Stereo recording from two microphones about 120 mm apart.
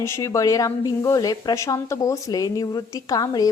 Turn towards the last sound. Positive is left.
turn(degrees=30)  # may be behind; listen again after turning